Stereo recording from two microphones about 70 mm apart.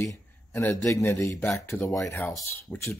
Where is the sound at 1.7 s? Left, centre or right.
Left.